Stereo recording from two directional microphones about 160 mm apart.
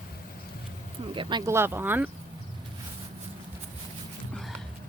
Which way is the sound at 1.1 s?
30° right (ahead or behind).